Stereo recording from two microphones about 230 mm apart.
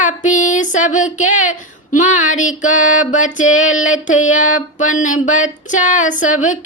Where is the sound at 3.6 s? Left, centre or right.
Left.